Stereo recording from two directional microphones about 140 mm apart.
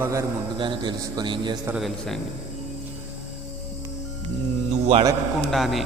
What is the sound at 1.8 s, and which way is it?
Speech, centre (ahead or behind).